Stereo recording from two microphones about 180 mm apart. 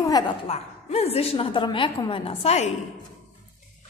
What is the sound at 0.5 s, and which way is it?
A woman's voice, 35° left (ahead or behind).